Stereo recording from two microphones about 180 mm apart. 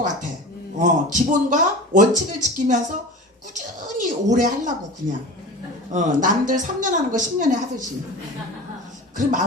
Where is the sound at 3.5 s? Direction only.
45° right (ahead or behind).